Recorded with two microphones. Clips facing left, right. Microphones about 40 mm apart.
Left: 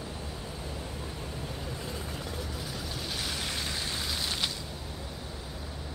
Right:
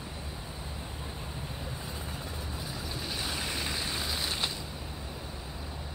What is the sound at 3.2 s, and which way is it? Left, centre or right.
Rain, right.